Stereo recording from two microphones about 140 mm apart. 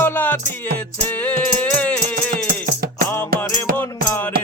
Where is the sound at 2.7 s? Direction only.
90° right.